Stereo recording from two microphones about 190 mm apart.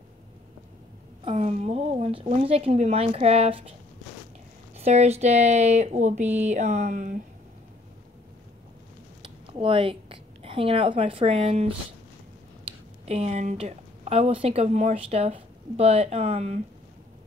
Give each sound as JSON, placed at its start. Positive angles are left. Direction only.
{"t": 1.2, "sound": "a woman's voice", "side_deg": -35}
{"t": 4.7, "sound": "a woman's voice", "side_deg": -35}
{"t": 9.2, "sound": "a woman's voice", "side_deg": -30}
{"t": 13.0, "sound": "a woman's voice", "side_deg": -35}